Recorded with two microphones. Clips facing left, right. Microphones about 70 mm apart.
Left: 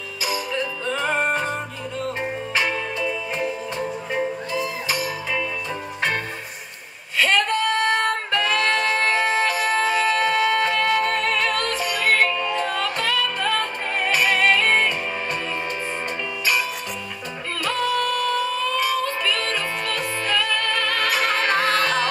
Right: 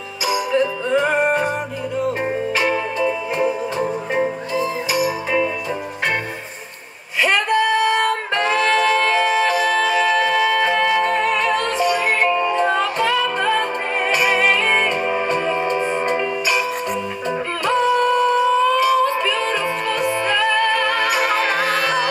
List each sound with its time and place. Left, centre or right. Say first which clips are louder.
0.3 s music: right 8 dB; centre
2.6 s music: right 6 dB; centre
3.8 s music: right 4 dB; right
4.9 s music: right 9 dB; centre
7.2 s music: right 3 dB; centre
17.6 s music: right 6 dB; right